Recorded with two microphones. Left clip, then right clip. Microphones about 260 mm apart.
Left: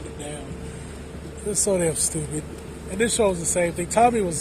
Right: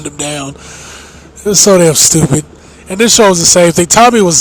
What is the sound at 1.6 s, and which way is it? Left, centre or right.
Speech, right.